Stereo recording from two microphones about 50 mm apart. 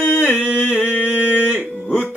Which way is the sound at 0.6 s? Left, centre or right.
Left.